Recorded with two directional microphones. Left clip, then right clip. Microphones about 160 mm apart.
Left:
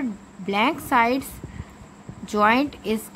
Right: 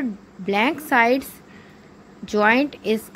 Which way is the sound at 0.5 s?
15° right (ahead or behind).